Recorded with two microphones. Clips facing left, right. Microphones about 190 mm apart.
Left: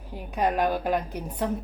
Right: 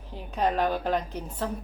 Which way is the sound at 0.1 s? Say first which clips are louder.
Left 1 dB; 10° left (ahead or behind).